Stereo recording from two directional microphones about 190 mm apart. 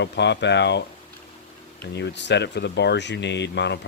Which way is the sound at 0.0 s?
65° left (ahead or behind).